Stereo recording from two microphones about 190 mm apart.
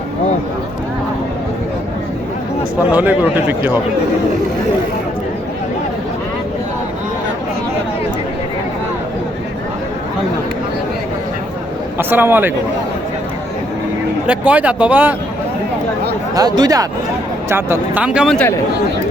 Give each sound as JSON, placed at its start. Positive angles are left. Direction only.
{"t": 2.9, "sound": "speech", "side_deg": -10}
{"t": 11.9, "sound": "a man's voice", "side_deg": -10}
{"t": 14.3, "sound": "speech", "side_deg": -5}
{"t": 16.3, "sound": "speech", "side_deg": -20}